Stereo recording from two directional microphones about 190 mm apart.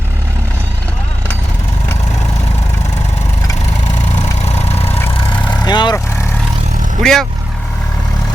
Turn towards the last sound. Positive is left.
turn(degrees=0)  # may be behind; listen again after turning